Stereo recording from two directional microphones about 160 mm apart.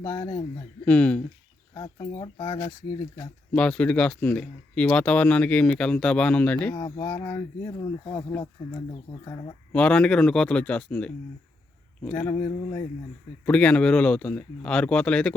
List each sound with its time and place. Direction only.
0.1 s speech: 15° left (ahead or behind)
1.7 s speech: 25° left (ahead or behind)
2.1 s speech: 35° left (ahead or behind)
3.5 s speech: 5° left (ahead or behind); by 8.2 s 25° left (ahead or behind)
9.7 s speech: 5° left (ahead or behind)